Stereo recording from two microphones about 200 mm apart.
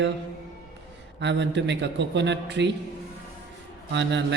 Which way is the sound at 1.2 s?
60° right (ahead or behind).